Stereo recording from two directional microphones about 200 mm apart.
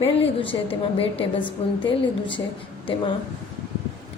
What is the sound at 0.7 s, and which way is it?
Speech, 30° left (ahead or behind).